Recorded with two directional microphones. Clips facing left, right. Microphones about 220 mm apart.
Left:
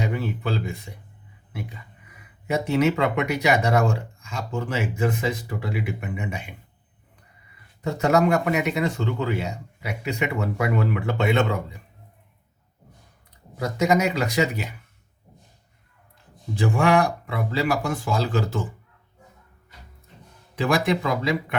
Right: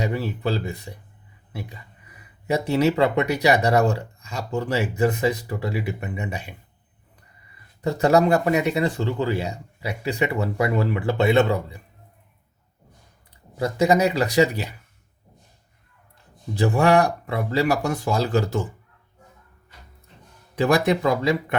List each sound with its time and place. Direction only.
0.0 s speech: 35° right (ahead or behind)
2.5 s speech: 35° right (ahead or behind)
7.9 s speech: 35° right (ahead or behind)
13.6 s speech: 30° right (ahead or behind)
16.6 s speech: 40° right (ahead or behind)
20.6 s speech: 40° right (ahead or behind)